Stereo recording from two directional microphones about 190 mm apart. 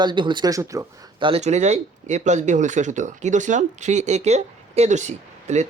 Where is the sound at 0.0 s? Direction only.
25° right (ahead or behind).